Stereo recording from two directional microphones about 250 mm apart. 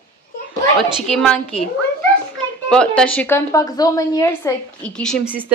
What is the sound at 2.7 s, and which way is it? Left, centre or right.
A woman's voice, centre.